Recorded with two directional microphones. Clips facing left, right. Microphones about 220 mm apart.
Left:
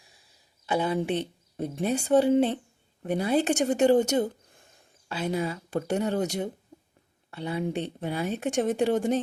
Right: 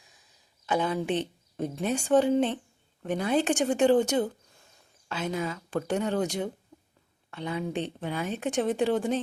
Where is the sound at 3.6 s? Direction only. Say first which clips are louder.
Left 1 dB; 40° left (ahead or behind).